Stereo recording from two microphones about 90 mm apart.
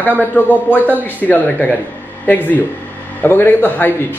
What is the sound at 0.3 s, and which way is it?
Speech, 20° left (ahead or behind).